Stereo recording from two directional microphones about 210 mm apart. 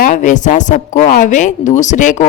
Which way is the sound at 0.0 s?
35° left (ahead or behind).